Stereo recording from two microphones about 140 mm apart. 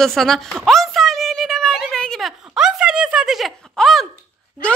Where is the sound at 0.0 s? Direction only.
Centre (ahead or behind).